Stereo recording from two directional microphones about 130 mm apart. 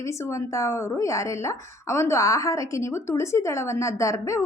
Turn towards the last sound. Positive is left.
turn(degrees=25)  # may be behind; listen again after turning